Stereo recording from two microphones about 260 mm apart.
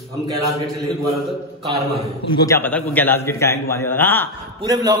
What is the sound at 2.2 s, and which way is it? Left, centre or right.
A man's voice, centre.